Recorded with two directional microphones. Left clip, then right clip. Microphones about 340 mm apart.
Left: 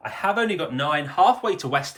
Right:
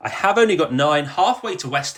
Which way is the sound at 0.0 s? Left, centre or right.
Centre.